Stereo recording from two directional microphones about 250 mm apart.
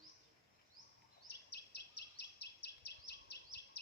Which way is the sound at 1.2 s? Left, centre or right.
Left.